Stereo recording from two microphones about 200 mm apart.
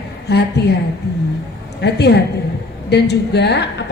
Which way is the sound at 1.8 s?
55° left (ahead or behind).